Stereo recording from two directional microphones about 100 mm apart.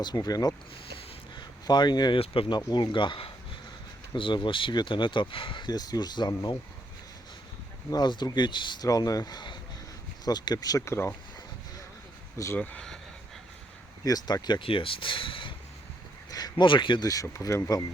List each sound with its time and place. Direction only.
0.0 s speech: 40° left (ahead or behind)
0.9 s a sound: 45° left (ahead or behind)
2.1 s speech: 65° left (ahead or behind)
2.6 s speech: 50° left (ahead or behind)
7.9 s speech: 45° left (ahead or behind)
8.9 s speech: 35° left (ahead or behind)
12.5 s speech: 15° left (ahead or behind)
14.0 s speech: 40° left (ahead or behind)
14.6 s speech: 60° left (ahead or behind)
16.3 s speech: 45° left (ahead or behind)
17.1 s speech: 35° left (ahead or behind)